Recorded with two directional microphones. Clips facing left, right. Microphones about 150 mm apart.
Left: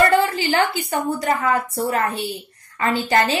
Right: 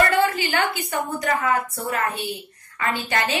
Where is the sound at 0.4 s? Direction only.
30° left (ahead or behind).